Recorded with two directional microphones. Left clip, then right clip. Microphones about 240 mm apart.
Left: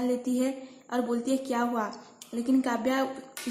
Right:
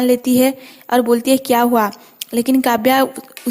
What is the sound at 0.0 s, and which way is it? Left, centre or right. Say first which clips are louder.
Speech: right 15 dB; right.